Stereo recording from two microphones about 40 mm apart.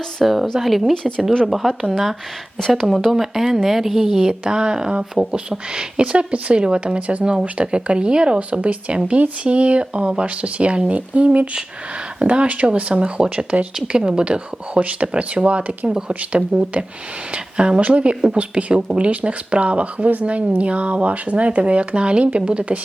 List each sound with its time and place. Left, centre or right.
0.2 s speech: centre
6.0 s speech: right
16.7 s speech: right
17.3 s speech: right